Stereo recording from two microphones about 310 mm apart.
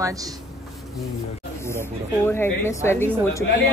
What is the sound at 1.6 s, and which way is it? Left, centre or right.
Speech, centre.